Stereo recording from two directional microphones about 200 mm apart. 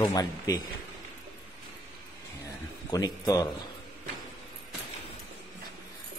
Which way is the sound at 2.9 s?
20° left (ahead or behind).